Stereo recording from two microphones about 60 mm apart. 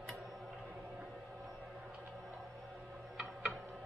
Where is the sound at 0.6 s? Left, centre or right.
Right.